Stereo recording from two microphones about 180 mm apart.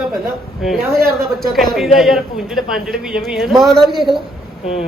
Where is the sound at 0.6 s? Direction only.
Centre (ahead or behind).